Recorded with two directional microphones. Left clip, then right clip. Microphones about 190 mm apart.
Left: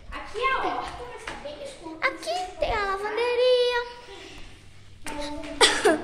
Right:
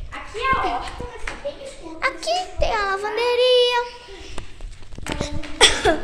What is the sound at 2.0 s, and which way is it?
Child singing, 5° right (ahead or behind).